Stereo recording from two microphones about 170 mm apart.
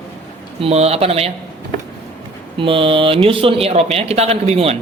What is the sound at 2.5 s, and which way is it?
A man's voice, 30° right (ahead or behind).